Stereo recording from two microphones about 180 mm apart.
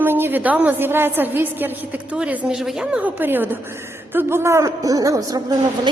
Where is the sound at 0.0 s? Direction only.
10° right (ahead or behind).